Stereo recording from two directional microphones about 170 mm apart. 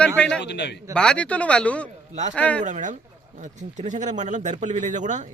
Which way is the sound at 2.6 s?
45° right (ahead or behind).